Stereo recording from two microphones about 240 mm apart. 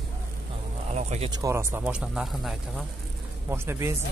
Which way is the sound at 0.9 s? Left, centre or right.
Right.